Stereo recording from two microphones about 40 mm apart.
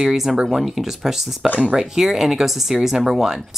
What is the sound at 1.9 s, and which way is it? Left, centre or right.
Speech, centre.